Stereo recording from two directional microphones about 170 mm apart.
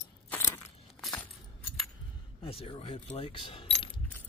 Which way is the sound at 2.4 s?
35° left (ahead or behind).